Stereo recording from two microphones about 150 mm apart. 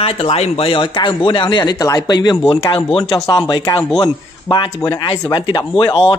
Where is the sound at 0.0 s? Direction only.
40° left (ahead or behind).